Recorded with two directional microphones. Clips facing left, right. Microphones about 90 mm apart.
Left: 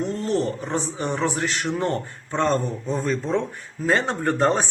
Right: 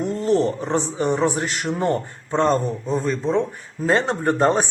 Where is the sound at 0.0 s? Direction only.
20° right (ahead or behind).